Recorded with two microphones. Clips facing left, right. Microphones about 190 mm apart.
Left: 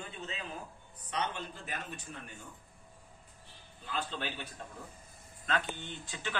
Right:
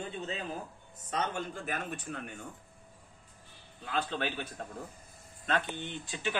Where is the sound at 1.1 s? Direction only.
45° right (ahead or behind).